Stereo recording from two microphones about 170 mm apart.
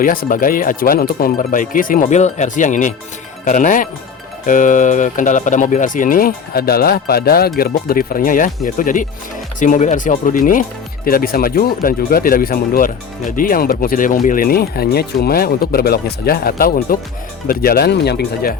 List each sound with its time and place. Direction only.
0.0 s speech: 55° left (ahead or behind)